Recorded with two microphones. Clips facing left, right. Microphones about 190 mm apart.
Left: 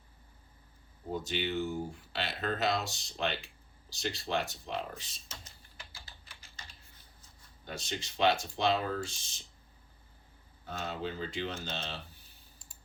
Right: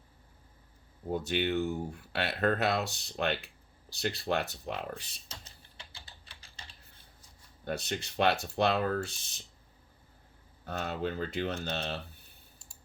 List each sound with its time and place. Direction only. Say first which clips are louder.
1.1 s speech: right 4 dB; 60° right (ahead or behind)
5.3 s typing: right 1 dB; 35° right (ahead or behind)
7.6 s speech: right 5 dB; 60° right (ahead or behind)
10.7 s speech: right 3 dB; 60° right (ahead or behind)